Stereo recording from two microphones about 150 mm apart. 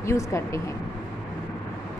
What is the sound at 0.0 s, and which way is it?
Speech, 20° left (ahead or behind).